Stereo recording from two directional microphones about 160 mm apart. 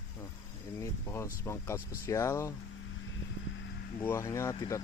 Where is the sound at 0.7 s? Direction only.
15° left (ahead or behind).